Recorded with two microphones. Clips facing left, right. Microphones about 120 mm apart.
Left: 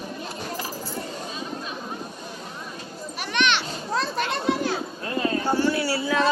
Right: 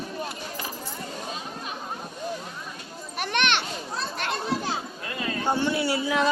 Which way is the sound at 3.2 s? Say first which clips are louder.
Left 1 dB; 55° right (ahead or behind).